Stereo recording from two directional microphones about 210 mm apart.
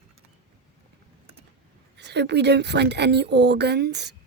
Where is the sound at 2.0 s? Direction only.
55° right (ahead or behind).